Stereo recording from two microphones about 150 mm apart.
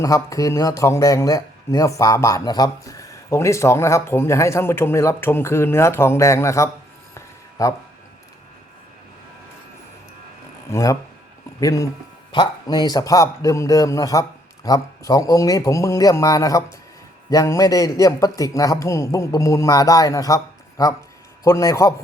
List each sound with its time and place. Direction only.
0.0 s a man's voice: 20° left (ahead or behind)
10.7 s a man's voice: 20° left (ahead or behind)